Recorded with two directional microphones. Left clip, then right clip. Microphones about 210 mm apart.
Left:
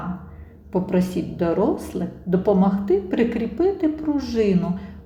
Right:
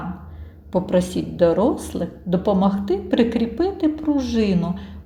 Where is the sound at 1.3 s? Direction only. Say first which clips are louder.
Right 4 dB; 20° right (ahead or behind).